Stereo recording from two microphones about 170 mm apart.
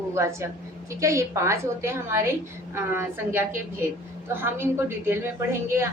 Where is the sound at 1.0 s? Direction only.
20° right (ahead or behind).